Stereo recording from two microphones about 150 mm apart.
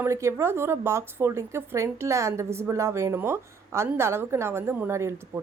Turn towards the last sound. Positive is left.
turn(degrees=-15)  # may be behind; listen again after turning